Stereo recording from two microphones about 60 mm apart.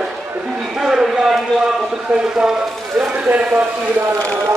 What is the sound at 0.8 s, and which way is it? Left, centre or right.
Speech, centre.